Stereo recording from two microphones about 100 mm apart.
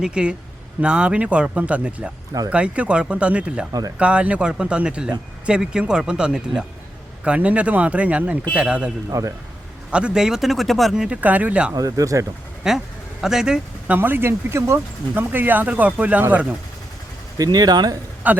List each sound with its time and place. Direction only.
0.0 s speech: 10° right (ahead or behind)
3.7 s speech: 40° right (ahead or behind)
3.9 s speech: 10° right (ahead or behind)
9.0 s speech: 35° right (ahead or behind)
9.9 s speech: 10° right (ahead or behind)
11.7 s speech: 40° right (ahead or behind)
12.7 s speech: 5° right (ahead or behind)
13.9 s speech: 20° right (ahead or behind)
17.3 s speech: 40° right (ahead or behind)
18.3 s speech: 15° right (ahead or behind)